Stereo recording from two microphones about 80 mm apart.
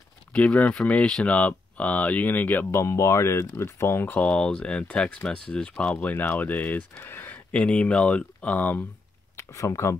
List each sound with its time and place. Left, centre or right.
0.3 s speech: centre
2.7 s speech: left
4.2 s speech: centre
9.4 s speech: left